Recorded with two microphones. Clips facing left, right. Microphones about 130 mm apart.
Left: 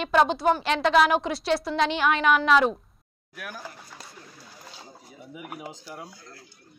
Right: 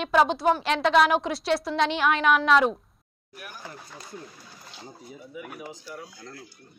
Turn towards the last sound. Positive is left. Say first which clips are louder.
# left 1 dB
turn(degrees=20)  # may be behind; listen again after turning